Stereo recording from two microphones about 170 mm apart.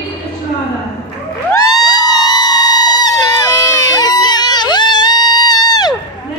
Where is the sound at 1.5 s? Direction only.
25° left (ahead or behind).